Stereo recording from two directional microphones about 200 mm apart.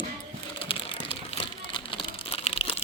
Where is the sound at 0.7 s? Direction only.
25° left (ahead or behind).